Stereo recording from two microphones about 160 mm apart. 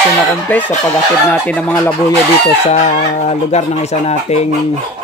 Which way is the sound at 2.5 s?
45° left (ahead or behind).